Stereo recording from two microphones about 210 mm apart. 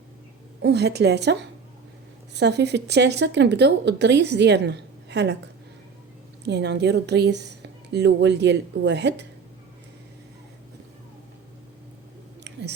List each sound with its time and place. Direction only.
0.6 s a woman's voice: 55° right (ahead or behind)
6.4 s a woman's voice: 55° right (ahead or behind)
12.5 s chewing: 55° right (ahead or behind)